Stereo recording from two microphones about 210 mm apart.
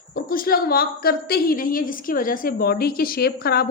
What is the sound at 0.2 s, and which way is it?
A woman's voice, 45° left (ahead or behind).